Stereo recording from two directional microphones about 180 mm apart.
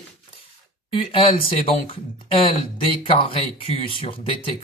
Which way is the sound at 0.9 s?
30° left (ahead or behind).